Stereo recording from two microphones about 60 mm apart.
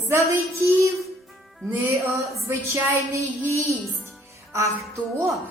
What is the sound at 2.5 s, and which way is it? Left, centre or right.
Child singing, right.